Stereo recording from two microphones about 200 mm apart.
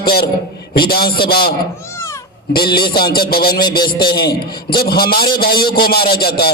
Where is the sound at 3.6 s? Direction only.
20° left (ahead or behind).